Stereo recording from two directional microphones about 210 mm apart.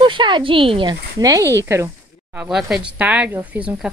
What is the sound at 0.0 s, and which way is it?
Speech, 25° right (ahead or behind).